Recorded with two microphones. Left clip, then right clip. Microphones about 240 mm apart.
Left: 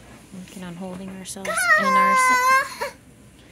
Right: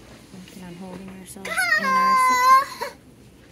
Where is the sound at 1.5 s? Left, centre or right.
Left.